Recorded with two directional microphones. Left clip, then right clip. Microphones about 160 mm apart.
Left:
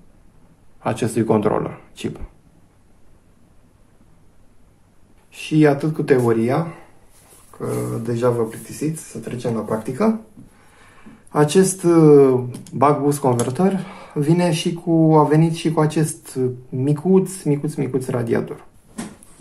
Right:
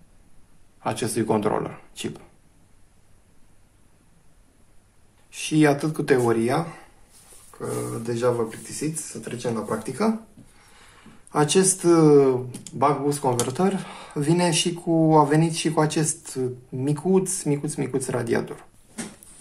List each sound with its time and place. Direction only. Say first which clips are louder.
0.7 s speech: left 4 dB; centre (ahead or behind)
5.3 s speech: left 4 dB; 10° right (ahead or behind)
7.6 s speech: left 4 dB; centre (ahead or behind)
11.3 s speech: left 4 dB; centre (ahead or behind)
12.7 s speech: left 5 dB; 20° left (ahead or behind)
13.2 s speech: left 4 dB; 5° right (ahead or behind)